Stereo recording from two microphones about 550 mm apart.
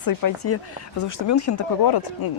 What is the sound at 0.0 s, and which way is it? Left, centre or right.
Speech, left.